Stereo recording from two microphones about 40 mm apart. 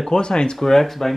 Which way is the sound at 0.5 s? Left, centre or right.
Centre.